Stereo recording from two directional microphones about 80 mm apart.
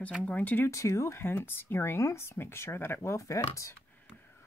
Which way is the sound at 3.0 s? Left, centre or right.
Left.